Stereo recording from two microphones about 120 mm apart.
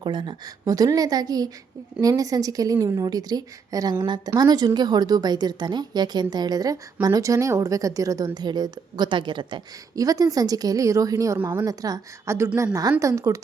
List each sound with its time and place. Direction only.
0.0 s a woman's voice: 40° right (ahead or behind)
9.9 s a woman's voice: 30° right (ahead or behind)